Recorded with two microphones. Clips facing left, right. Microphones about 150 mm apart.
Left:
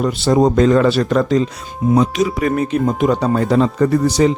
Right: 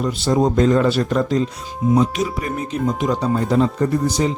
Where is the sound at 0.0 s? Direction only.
70° left (ahead or behind); by 1.5 s 90° left.